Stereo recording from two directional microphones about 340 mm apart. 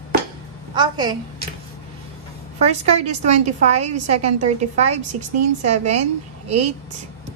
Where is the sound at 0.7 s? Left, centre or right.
Centre.